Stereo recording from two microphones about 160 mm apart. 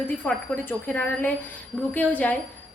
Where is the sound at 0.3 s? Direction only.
10° left (ahead or behind).